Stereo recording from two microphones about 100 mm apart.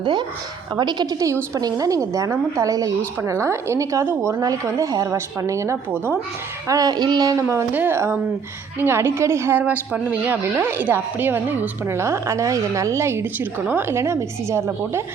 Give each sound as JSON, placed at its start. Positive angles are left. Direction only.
{"t": 0.0, "sound": "a woman's voice", "side_deg": -45}
{"t": 1.5, "sound": "a woman's voice", "side_deg": -35}
{"t": 6.7, "sound": "a woman's voice", "side_deg": -40}
{"t": 7.4, "sound": "a woman's voice", "side_deg": -20}